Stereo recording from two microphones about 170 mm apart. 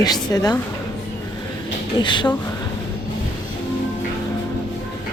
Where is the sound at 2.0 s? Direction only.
25° left (ahead or behind).